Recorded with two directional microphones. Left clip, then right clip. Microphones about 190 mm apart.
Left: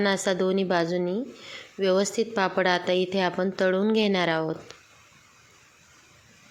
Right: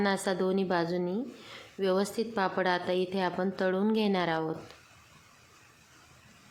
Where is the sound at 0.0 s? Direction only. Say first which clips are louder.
Left 5 dB; 15° left (ahead or behind).